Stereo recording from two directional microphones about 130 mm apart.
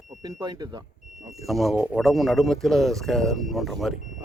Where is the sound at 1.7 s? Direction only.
10° right (ahead or behind).